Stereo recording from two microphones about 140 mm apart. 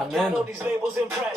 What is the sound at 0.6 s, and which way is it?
Speech, 15° right (ahead or behind).